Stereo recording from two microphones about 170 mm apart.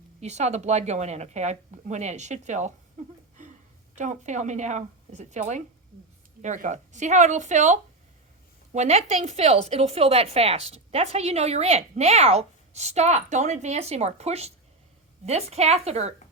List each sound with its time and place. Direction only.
0.2 s a woman's voice: 40° right (ahead or behind)
3.9 s a woman's voice: 45° right (ahead or behind)